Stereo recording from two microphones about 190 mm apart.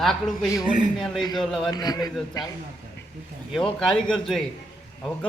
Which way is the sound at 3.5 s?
5° left (ahead or behind).